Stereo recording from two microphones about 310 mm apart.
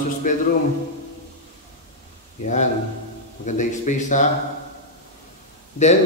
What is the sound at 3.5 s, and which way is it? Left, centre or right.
Speech, left.